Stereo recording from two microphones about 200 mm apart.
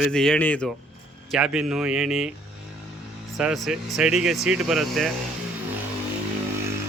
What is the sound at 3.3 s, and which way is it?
Speech, centre (ahead or behind).